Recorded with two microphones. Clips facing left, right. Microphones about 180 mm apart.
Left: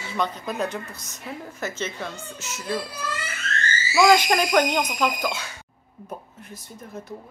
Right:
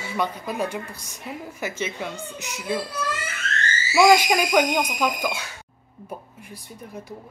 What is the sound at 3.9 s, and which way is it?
A woman's voice, 10° right (ahead or behind).